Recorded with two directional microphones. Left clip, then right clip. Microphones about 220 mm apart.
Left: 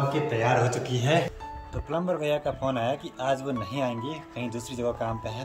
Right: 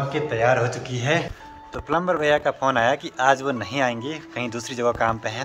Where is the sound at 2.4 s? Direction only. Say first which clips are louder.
Right 8 dB; 35° right (ahead or behind).